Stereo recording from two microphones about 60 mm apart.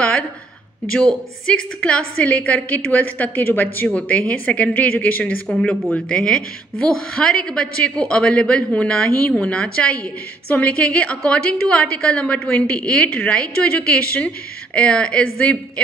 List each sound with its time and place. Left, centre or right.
0.0 s a woman's voice: centre
1.8 s a woman's voice: left
5.5 s a woman's voice: centre